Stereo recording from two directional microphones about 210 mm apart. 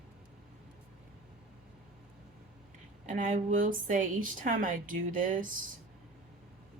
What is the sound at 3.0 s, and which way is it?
A woman's voice, 35° right (ahead or behind).